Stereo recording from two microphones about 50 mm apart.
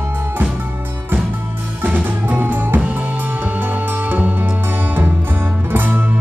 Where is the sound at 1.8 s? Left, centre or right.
Right.